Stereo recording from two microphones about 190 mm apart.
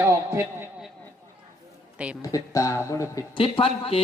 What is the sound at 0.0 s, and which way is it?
Speech, 15° right (ahead or behind).